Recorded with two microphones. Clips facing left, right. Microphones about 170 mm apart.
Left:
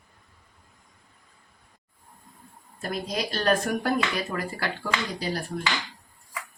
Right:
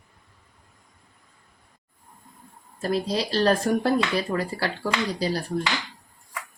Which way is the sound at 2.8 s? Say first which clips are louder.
Right 5 dB; 30° right (ahead or behind).